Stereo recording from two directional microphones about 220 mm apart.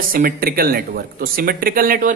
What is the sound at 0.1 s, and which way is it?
A man's voice, 40° right (ahead or behind).